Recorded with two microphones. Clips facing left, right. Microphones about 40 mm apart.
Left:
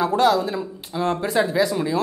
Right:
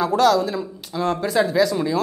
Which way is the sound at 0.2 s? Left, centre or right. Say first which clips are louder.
Right 3 dB; centre.